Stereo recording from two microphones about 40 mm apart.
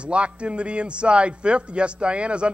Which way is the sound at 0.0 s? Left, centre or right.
Right.